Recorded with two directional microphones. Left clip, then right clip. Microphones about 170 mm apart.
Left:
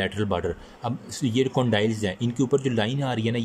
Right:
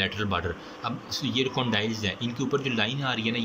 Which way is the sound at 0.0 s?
35° left (ahead or behind).